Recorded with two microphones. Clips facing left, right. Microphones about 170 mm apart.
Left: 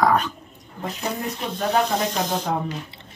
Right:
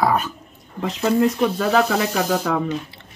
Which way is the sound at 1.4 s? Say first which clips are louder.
Right 5 dB; 90° right.